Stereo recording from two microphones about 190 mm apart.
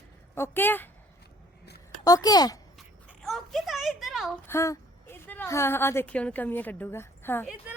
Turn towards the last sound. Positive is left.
turn(degrees=-5)  # may be behind; listen again after turning